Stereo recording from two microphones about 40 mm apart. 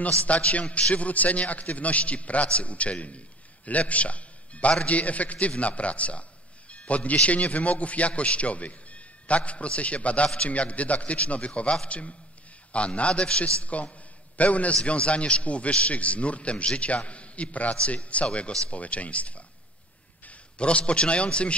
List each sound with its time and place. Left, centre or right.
0.0 s a man's voice: left